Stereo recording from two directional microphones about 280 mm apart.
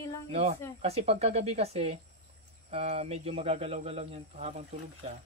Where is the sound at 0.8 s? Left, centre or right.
Right.